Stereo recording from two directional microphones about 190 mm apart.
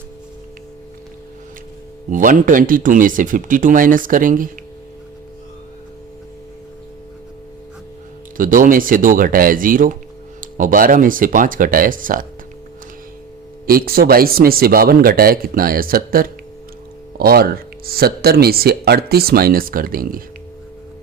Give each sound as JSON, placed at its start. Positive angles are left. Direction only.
{"t": 2.0, "sound": "speech", "side_deg": -45}
{"t": 8.4, "sound": "speech", "side_deg": -45}
{"t": 13.7, "sound": "speech", "side_deg": -50}